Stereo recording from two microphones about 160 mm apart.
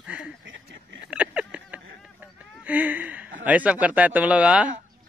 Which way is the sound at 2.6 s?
10° right (ahead or behind).